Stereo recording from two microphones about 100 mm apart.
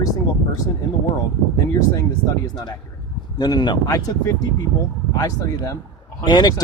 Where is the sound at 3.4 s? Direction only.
45° left (ahead or behind).